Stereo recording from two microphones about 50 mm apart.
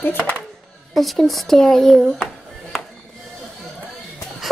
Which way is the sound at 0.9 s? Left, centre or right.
Centre.